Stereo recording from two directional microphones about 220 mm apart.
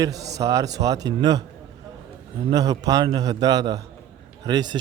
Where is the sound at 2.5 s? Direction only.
20° right (ahead or behind).